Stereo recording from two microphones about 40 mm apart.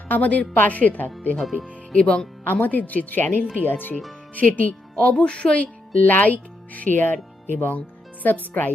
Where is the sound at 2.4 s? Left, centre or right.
Left.